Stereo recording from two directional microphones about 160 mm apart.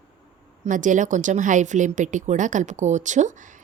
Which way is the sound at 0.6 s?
50° right (ahead or behind).